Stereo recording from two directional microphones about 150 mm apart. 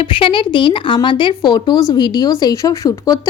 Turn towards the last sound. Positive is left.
turn(degrees=20)  # may be behind; listen again after turning